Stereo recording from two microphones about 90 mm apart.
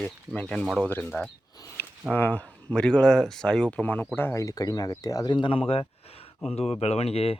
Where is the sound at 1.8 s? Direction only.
25° left (ahead or behind).